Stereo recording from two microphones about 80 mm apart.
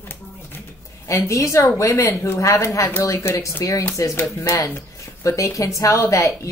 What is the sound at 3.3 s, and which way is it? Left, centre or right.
A woman's voice, left.